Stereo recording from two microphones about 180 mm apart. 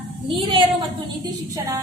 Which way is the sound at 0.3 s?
30° right (ahead or behind).